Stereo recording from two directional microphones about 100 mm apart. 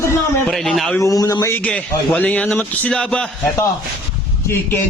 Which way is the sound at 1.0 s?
35° left (ahead or behind).